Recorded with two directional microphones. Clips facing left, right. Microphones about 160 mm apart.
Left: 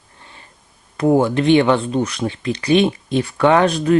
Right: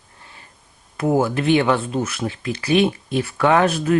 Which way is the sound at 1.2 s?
25° left (ahead or behind).